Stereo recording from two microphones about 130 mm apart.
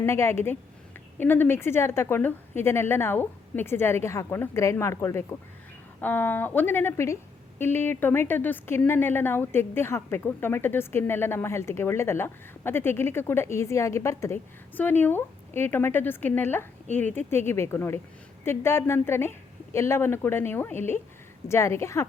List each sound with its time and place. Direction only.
0.0 s a woman's voice: 20° left (ahead or behind)